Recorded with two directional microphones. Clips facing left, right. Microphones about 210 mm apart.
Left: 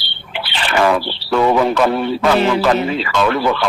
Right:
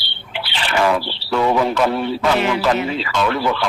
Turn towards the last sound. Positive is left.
turn(degrees=60)  # may be behind; listen again after turning